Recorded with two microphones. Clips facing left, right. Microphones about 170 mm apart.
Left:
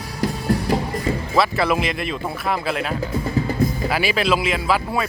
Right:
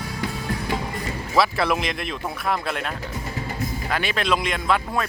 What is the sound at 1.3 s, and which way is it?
Speech, centre (ahead or behind).